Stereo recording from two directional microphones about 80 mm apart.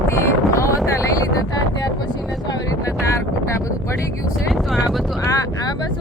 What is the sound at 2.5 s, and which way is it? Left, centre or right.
Wind noise, left.